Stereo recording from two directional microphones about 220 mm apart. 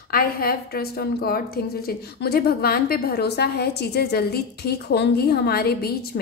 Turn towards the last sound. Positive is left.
turn(degrees=45)  # may be behind; listen again after turning